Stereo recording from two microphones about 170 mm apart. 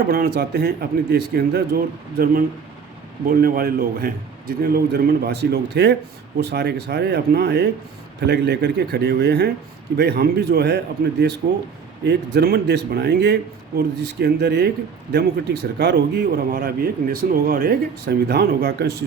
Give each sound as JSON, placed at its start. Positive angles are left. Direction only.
{"t": 0.0, "sound": "a man's voice", "side_deg": -65}
{"t": 18.3, "sound": "speech", "side_deg": -75}